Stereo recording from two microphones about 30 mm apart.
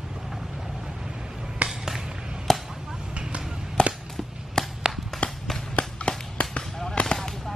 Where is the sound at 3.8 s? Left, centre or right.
Left.